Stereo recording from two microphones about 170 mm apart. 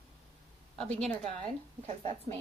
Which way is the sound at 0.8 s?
5° left (ahead or behind).